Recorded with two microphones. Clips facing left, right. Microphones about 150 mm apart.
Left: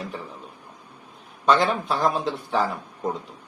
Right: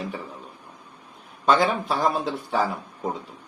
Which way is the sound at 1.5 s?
Centre (ahead or behind).